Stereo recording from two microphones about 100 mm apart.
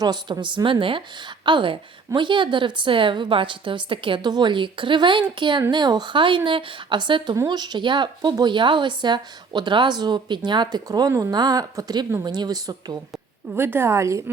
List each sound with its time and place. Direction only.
0.0 s a woman's voice: 45° right (ahead or behind)
13.6 s a woman's voice: 25° right (ahead or behind)